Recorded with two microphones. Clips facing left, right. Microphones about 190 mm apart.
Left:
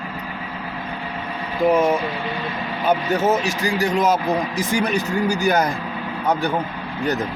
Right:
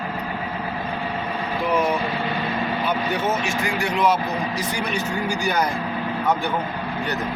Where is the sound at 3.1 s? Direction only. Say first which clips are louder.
Left 4 dB; 35° left (ahead or behind).